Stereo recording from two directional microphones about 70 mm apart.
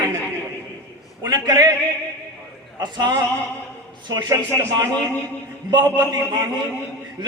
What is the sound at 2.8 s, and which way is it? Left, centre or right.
Speech, right.